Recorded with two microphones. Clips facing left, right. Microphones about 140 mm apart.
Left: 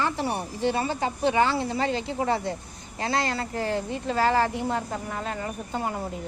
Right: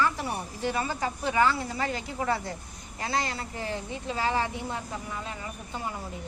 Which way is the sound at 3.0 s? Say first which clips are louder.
Left 4 dB; 40° left (ahead or behind).